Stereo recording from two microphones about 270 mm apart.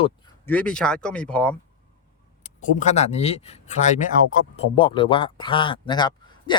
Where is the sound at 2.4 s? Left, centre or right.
Left.